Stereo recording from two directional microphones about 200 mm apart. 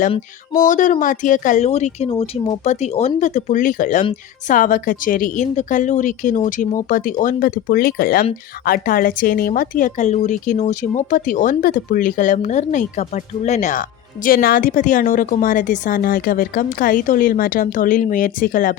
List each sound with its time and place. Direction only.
0.6 s a woman's voice: 40° left (ahead or behind)